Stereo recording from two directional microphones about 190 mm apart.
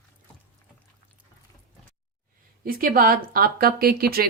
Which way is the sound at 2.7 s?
50° right (ahead or behind).